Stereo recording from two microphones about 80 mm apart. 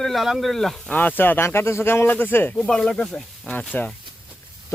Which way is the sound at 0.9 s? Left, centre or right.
Left.